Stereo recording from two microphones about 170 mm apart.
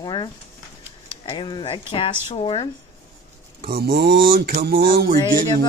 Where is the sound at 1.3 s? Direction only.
30° left (ahead or behind).